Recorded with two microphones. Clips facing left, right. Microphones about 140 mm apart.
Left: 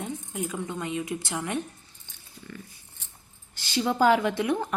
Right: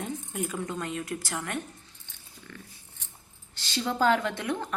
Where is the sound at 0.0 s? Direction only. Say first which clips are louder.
Even; 15° left (ahead or behind).